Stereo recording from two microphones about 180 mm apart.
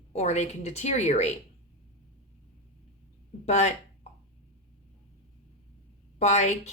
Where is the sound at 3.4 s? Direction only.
40° left (ahead or behind).